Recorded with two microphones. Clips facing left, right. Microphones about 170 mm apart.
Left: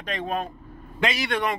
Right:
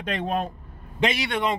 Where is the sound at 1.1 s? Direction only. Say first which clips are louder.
Right 1 dB; 25° right (ahead or behind).